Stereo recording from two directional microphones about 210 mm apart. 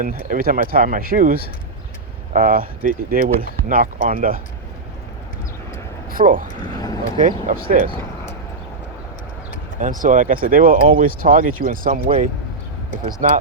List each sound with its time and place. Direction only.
0.0 s speech: 40° right (ahead or behind)
6.1 s speech: 40° right (ahead or behind)
6.7 s speech: 15° left (ahead or behind)
7.2 s speech: 40° right (ahead or behind)
10.0 s speech: 40° right (ahead or behind)